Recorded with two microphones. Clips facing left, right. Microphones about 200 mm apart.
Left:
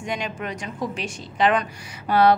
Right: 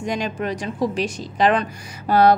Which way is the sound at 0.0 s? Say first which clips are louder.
Right 5 dB; 40° right (ahead or behind).